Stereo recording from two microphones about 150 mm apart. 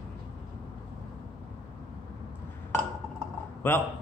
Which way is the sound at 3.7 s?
15° left (ahead or behind).